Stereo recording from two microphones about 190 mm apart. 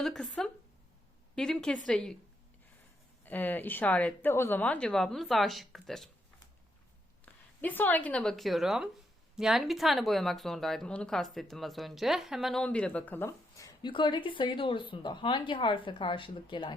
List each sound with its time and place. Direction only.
0.0 s a woman's voice: 5° left (ahead or behind)
3.2 s speech: 10° left (ahead or behind)
7.6 s a woman's voice: 10° left (ahead or behind); by 16.7 s 25° left (ahead or behind)